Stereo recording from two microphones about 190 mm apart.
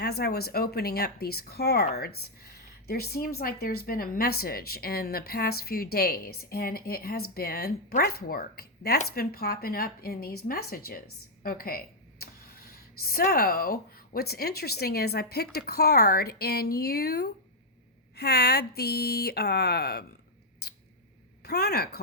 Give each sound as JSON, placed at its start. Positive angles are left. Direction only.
{"t": 0.0, "sound": "speech", "side_deg": 55}
{"t": 20.6, "sound": "scissors", "side_deg": 60}
{"t": 21.4, "sound": "speech", "side_deg": 55}